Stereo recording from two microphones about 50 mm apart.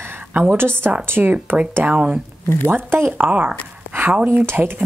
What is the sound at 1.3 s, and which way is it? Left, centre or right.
Speech, centre.